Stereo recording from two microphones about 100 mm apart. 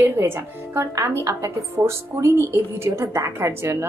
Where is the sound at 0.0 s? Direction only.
25° right (ahead or behind).